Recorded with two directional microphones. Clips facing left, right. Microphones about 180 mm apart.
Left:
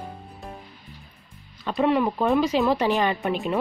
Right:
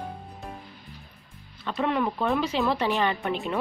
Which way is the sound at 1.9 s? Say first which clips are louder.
Left 4 dB; 5° left (ahead or behind).